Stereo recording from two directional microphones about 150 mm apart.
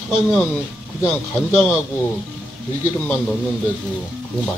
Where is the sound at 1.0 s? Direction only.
20° left (ahead or behind).